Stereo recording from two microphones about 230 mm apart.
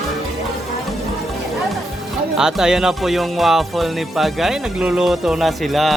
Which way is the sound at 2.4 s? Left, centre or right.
Centre.